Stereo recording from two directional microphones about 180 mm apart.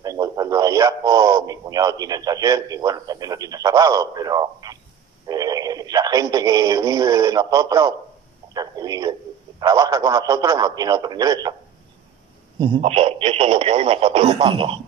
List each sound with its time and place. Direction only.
0.0 s speech: 20° right (ahead or behind)
8.5 s a sound: 20° right (ahead or behind)
9.6 s a man's voice: 20° right (ahead or behind)
12.5 s speech: 25° right (ahead or behind)